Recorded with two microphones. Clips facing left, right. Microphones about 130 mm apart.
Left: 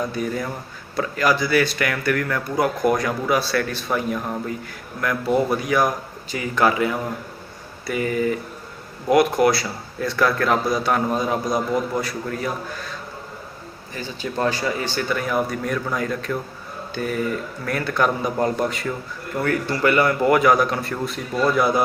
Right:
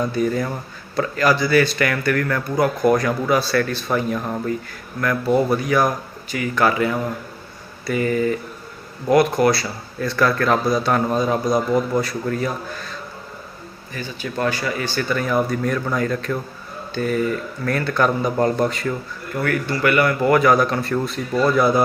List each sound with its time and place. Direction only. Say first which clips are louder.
0.1 s a man's voice: right 4 dB; 5° left (ahead or behind)
13.9 s speech: even; 25° left (ahead or behind)
15.1 s a man's voice: right 3 dB; 10° left (ahead or behind)
19.4 s a man's voice: even; 25° left (ahead or behind); by 21.8 s 10° left (ahead or behind)